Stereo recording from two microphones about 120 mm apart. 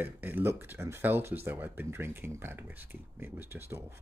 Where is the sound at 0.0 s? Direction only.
15° right (ahead or behind).